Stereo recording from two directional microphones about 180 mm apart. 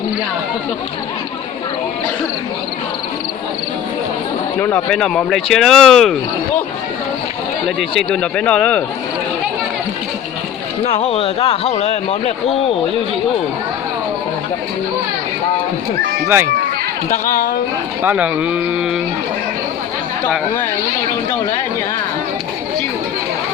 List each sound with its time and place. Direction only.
4.6 s speech: 5° left (ahead or behind)
7.8 s speech: centre (ahead or behind)
10.9 s speech: 30° left (ahead or behind)
17.1 s a woman's voice: 45° left (ahead or behind)
18.0 s speech: 10° right (ahead or behind)